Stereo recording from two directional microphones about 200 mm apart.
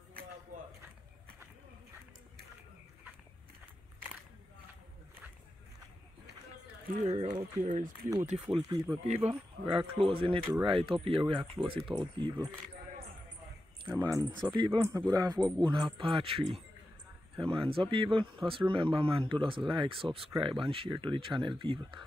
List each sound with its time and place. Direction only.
7.1 s speech: 30° right (ahead or behind)
13.8 s speech: 15° right (ahead or behind)